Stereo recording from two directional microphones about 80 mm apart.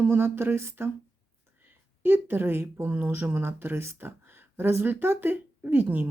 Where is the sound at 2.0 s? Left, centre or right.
Right.